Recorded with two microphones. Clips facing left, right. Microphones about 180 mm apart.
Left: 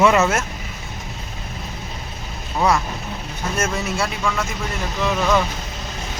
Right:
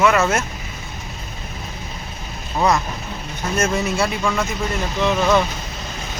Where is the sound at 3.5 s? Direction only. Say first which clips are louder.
Right 4 dB; 10° left (ahead or behind).